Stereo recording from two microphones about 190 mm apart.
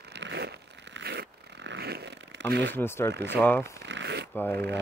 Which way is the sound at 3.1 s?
65° right (ahead or behind).